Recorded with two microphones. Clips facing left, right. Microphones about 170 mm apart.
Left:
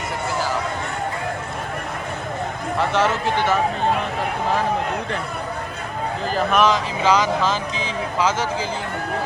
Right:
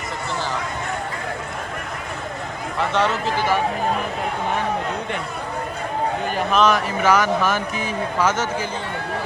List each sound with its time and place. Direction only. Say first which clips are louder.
2.7 s a man's voice: left 1 dB; centre (ahead or behind)
6.6 s speech: right 2 dB; 15° left (ahead or behind)